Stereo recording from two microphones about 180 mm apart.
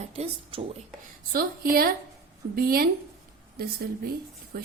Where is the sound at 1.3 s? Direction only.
55° right (ahead or behind).